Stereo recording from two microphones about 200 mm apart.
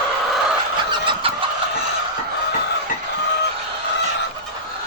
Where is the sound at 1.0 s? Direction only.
25° right (ahead or behind).